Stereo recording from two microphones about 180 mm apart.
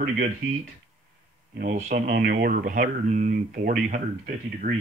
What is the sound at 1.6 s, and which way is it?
Speech, 45° right (ahead or behind).